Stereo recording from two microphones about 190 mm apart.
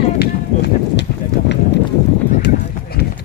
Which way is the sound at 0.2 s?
65° left (ahead or behind).